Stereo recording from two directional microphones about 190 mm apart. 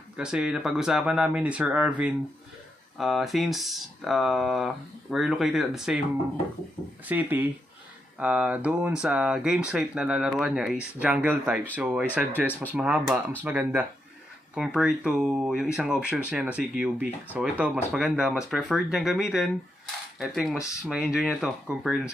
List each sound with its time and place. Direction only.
0.2 s speech: 5° right (ahead or behind)
7.1 s speech: 10° right (ahead or behind)